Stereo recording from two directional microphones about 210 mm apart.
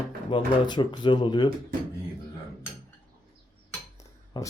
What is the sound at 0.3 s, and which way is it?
Speech, 20° left (ahead or behind).